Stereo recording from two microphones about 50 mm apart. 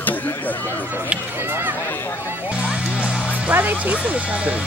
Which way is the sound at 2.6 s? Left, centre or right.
Right.